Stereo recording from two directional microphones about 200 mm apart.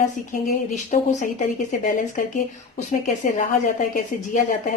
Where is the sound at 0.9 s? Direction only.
40° left (ahead or behind).